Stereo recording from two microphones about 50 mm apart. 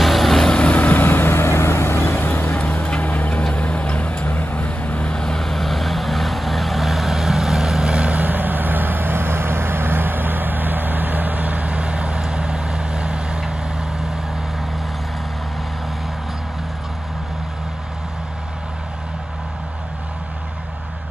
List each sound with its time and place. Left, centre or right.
0.0 s vehicle: centre
0.5 s vehicle: left
0.7 s vehicle: left
3.0 s vehicle: left
4.2 s vehicle: left
5.1 s vehicle: centre